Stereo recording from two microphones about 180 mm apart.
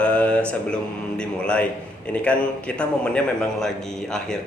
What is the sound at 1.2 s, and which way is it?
A man's voice, 5° left (ahead or behind).